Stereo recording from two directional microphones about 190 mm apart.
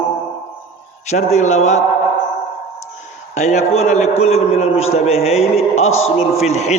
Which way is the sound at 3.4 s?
35° left (ahead or behind).